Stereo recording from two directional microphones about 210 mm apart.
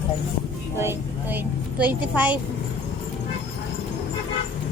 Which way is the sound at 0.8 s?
10° right (ahead or behind).